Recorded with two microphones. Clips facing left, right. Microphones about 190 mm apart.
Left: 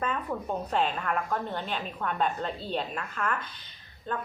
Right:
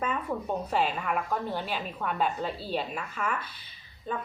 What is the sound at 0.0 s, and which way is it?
A woman's voice, 5° right (ahead or behind).